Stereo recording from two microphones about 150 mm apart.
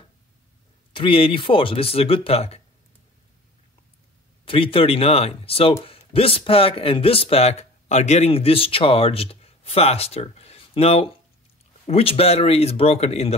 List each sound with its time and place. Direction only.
0.9 s speech: 35° left (ahead or behind)
4.5 s speech: 35° left (ahead or behind)